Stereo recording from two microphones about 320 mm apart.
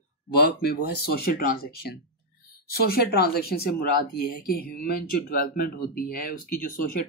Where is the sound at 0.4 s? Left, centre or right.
Left.